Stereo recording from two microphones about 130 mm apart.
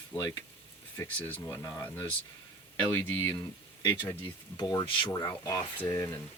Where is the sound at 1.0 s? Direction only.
15° left (ahead or behind).